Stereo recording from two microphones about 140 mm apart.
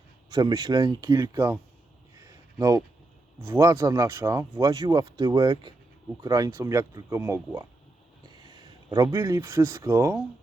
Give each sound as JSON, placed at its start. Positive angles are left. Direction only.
{"t": 0.3, "sound": "speech", "side_deg": -30}
{"t": 2.1, "sound": "a sound", "side_deg": -25}
{"t": 3.4, "sound": "a man's voice", "side_deg": -20}